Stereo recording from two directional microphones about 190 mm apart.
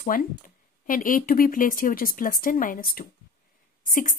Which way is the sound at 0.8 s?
45° left (ahead or behind).